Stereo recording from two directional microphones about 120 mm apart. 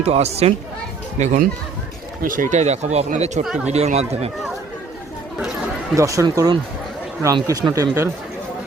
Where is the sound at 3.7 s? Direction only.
65° right (ahead or behind).